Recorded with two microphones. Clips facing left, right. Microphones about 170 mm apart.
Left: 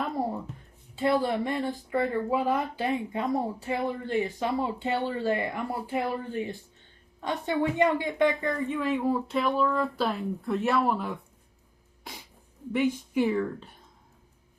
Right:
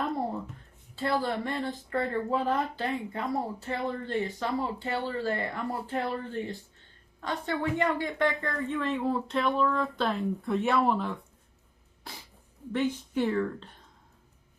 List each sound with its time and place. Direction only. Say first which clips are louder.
1.2 s speech: left 3 dB; 20° left (ahead or behind)
12.7 s speech: left 3 dB; 10° left (ahead or behind)